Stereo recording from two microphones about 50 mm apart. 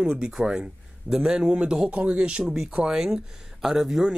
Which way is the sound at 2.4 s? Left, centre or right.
Centre.